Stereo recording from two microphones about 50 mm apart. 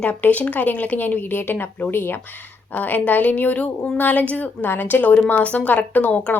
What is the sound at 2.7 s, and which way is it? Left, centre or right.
A woman's voice, left.